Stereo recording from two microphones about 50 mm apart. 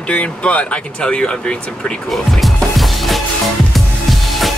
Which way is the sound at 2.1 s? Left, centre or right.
Centre.